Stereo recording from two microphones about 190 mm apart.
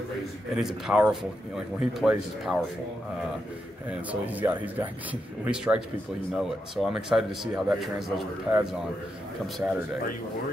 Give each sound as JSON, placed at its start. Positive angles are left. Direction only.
{"t": 0.6, "sound": "a man's voice", "side_deg": -5}
{"t": 3.9, "sound": "a man's voice", "side_deg": -10}